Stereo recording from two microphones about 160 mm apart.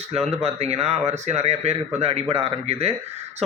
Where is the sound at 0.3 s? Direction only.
40° right (ahead or behind).